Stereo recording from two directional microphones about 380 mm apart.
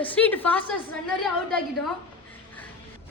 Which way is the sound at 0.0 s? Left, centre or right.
Centre.